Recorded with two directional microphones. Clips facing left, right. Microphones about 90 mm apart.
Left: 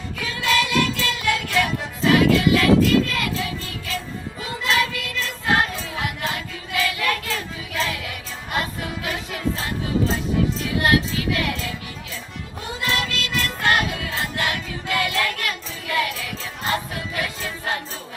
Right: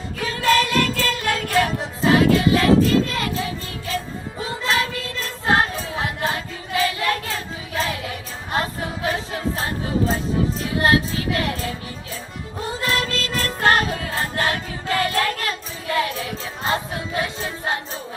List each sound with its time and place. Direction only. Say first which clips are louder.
0.2 s music: right 4 dB; 40° right (ahead or behind)